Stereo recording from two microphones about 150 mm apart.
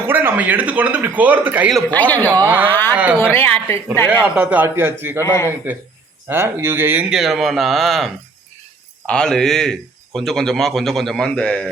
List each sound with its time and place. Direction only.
0.1 s a man's voice: 15° right (ahead or behind)
1.7 s a man's voice: 10° left (ahead or behind)
2.3 s speech: 20° right (ahead or behind)
2.6 s a man's voice: 15° left (ahead or behind)
4.1 s a man's voice: 10° right (ahead or behind)
5.2 s a man's voice: 20° left (ahead or behind)
6.2 s a man's voice: 15° right (ahead or behind); by 11.7 s 5° left (ahead or behind)